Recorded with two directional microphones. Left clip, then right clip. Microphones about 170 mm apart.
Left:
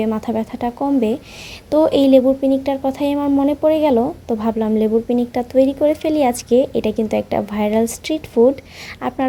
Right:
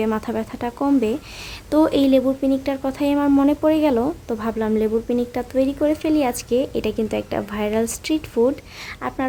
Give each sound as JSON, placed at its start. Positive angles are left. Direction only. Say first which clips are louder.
{"t": 0.0, "sound": "speech", "louder": "left 2 dB", "side_deg": 5}
{"t": 1.7, "sound": "speech", "louder": "left 4 dB", "side_deg": 5}
{"t": 9.0, "sound": "speech", "louder": "left 4 dB", "side_deg": 15}